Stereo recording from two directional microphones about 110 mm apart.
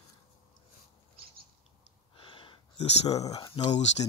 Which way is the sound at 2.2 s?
50° left (ahead or behind).